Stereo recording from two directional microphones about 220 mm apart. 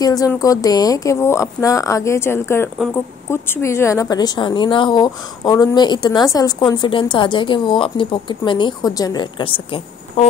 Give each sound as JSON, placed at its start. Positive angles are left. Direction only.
{"t": 0.0, "sound": "speech", "side_deg": 15}